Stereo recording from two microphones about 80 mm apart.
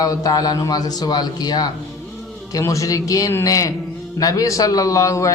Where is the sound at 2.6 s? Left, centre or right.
Left.